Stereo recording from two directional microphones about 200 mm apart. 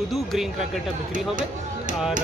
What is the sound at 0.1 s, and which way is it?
Speech, centre (ahead or behind).